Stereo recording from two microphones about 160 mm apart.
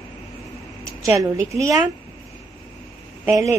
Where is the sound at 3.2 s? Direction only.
20° right (ahead or behind).